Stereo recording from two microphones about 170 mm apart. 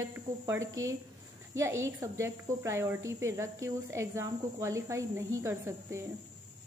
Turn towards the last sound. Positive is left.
turn(degrees=-15)  # may be behind; listen again after turning